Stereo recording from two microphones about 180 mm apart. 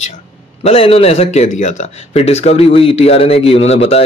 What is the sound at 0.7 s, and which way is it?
Speech, 30° left (ahead or behind).